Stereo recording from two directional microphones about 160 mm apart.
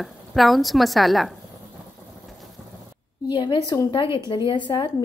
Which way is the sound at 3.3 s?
25° left (ahead or behind).